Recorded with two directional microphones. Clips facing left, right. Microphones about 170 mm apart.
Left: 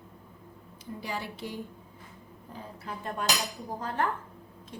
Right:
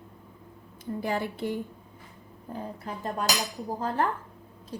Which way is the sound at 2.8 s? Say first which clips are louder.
Right 1 dB; 40° right (ahead or behind).